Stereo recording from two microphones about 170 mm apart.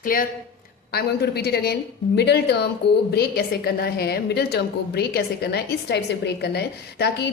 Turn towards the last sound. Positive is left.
turn(degrees=75)  # may be behind; listen again after turning